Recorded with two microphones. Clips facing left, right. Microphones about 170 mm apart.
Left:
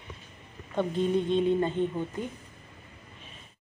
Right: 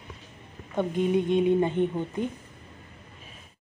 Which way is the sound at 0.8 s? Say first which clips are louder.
Right 2 dB; 15° right (ahead or behind).